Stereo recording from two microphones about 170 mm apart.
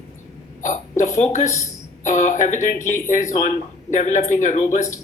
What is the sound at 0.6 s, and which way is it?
Hiccup, 45° left (ahead or behind).